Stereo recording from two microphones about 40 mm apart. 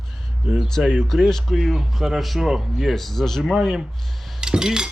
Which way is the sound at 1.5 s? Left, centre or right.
Centre.